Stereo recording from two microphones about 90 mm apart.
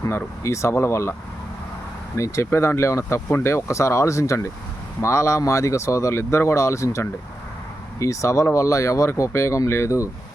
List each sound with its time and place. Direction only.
0.4 s speech: 35° left (ahead or behind)
2.1 s speech: 35° left (ahead or behind)